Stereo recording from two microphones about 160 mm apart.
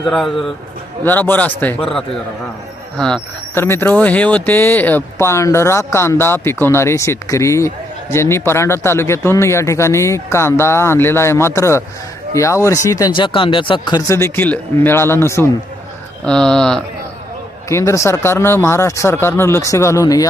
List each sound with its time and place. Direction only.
0.0 s speech: centre (ahead or behind)
1.0 s speech: 10° left (ahead or behind)
3.0 s speech: 5° left (ahead or behind)
16.2 s speech: 5° left (ahead or behind)
17.7 s speech: 20° left (ahead or behind)